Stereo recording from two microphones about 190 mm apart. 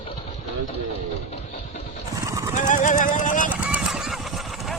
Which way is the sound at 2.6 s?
40° left (ahead or behind).